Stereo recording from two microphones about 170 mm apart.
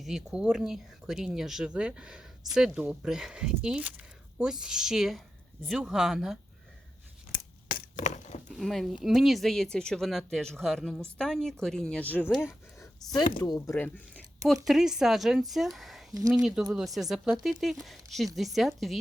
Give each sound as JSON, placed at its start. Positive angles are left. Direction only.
{"t": 0.0, "sound": "speech", "side_deg": -5}
{"t": 7.3, "sound": "a sound", "side_deg": 50}
{"t": 8.4, "sound": "speech", "side_deg": 0}
{"t": 12.2, "sound": "speech", "side_deg": -5}